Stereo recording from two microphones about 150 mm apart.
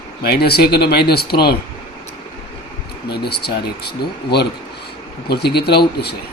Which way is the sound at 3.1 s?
90° left.